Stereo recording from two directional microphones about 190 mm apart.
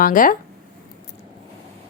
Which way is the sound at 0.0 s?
45° left (ahead or behind).